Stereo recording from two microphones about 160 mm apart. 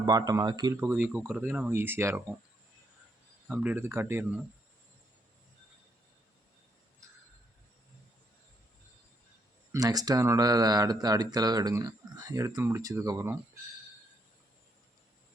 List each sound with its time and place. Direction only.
0.0 s speech: 25° right (ahead or behind)
3.5 s speech: 10° right (ahead or behind)
9.7 s speech: 25° right (ahead or behind)